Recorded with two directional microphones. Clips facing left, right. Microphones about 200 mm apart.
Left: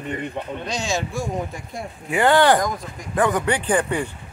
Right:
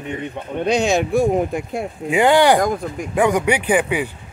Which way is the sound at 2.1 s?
15° right (ahead or behind).